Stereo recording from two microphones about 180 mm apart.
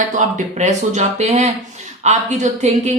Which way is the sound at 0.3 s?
40° right (ahead or behind).